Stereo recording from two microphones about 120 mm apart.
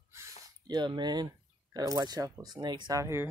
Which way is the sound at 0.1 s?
25° right (ahead or behind).